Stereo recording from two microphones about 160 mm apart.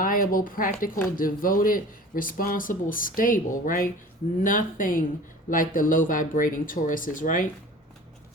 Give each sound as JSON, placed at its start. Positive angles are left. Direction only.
{"t": 0.0, "sound": "speech", "side_deg": 60}